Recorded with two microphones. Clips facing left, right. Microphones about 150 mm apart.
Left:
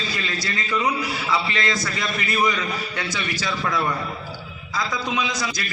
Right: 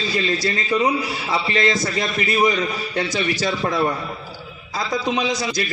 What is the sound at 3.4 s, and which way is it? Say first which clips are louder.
A man's voice: right 2 dB; 35° right (ahead or behind).